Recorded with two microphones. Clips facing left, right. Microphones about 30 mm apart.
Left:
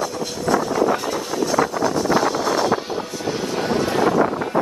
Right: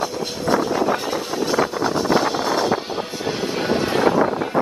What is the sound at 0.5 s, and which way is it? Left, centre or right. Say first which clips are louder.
Vehicle: left 1 dB; right.